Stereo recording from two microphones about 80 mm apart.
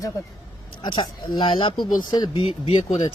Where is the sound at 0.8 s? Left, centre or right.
Left.